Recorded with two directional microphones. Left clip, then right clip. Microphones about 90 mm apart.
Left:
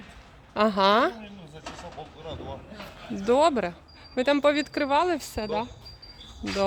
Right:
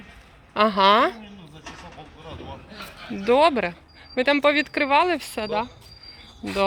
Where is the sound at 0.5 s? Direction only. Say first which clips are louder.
Right 4 dB; 5° left (ahead or behind).